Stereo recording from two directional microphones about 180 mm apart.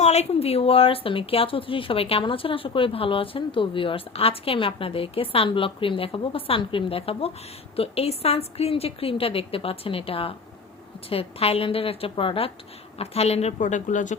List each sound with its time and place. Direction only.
0.0 s speech: 35° left (ahead or behind)